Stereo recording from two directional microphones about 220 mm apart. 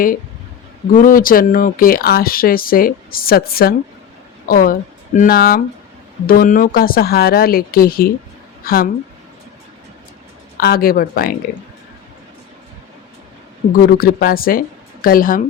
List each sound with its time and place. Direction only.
0.9 s a woman's voice: 40° left (ahead or behind)
10.6 s speech: 45° left (ahead or behind)
13.7 s speech: 40° left (ahead or behind)